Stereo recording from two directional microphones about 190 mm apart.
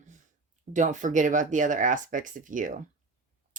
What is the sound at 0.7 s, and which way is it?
Speech, 40° right (ahead or behind).